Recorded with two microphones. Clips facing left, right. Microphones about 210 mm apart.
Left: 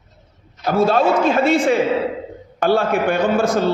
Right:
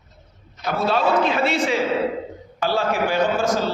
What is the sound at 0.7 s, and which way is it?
A man's voice, 50° left (ahead or behind).